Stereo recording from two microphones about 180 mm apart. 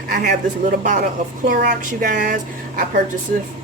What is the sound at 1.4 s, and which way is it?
Speech, 50° right (ahead or behind).